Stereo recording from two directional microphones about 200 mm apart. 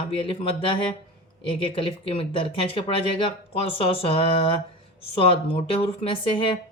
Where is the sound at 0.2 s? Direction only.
25° left (ahead or behind).